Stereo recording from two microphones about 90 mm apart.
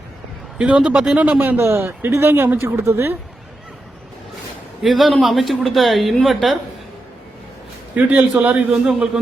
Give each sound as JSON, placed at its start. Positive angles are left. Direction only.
{"t": 0.6, "sound": "speech", "side_deg": -15}
{"t": 4.8, "sound": "a woman's voice", "side_deg": 0}
{"t": 7.9, "sound": "a man's voice", "side_deg": -15}